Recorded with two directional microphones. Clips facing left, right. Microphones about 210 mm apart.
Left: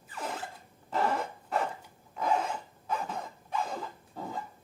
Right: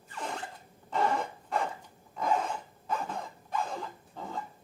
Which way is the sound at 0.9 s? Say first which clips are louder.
Even; centre (ahead or behind).